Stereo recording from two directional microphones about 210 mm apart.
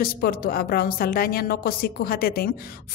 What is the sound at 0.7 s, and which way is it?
Speech, 45° left (ahead or behind).